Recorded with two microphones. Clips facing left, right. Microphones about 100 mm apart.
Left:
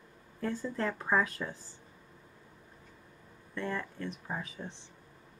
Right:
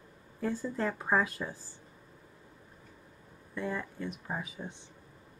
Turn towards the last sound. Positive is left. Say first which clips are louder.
# right 1 dB
turn(degrees=-10)  # may be behind; listen again after turning